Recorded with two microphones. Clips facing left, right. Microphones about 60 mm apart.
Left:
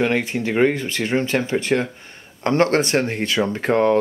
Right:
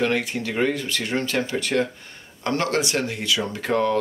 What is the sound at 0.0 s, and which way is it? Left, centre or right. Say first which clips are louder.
Speech: left 3 dB; left.